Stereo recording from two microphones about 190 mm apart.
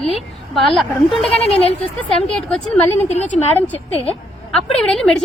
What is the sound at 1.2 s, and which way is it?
Speech, 30° left (ahead or behind).